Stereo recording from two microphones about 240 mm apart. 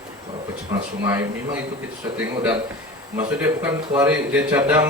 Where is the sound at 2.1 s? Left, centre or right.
Centre.